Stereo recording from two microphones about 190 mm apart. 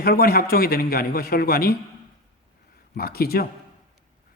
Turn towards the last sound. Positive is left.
turn(degrees=55)  # may be behind; listen again after turning